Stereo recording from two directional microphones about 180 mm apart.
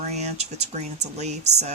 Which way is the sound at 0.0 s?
40° right (ahead or behind).